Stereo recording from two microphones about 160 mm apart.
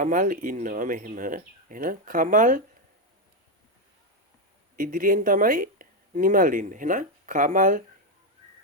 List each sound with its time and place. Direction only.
0.0 s speech: 55° right (ahead or behind)
4.8 s speech: 60° right (ahead or behind)